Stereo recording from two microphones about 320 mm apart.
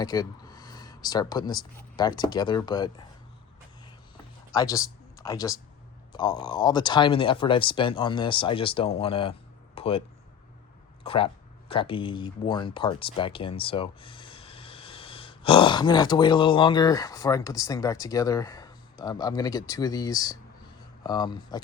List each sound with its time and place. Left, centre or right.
0.0 s speech: centre
4.5 s speech: centre
9.7 s a sound: centre
11.0 s speech: centre